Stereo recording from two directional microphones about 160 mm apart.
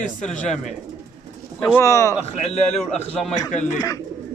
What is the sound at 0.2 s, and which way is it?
Speech, 50° left (ahead or behind).